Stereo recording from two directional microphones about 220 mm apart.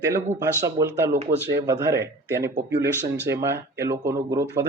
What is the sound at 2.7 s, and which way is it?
Speech, 50° right (ahead or behind).